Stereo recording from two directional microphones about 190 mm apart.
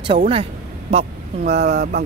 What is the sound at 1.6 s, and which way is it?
Speech, 55° right (ahead or behind).